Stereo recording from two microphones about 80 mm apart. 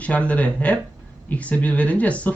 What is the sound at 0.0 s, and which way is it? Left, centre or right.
Speech, centre.